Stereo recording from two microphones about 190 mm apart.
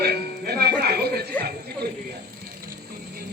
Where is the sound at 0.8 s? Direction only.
55° right (ahead or behind).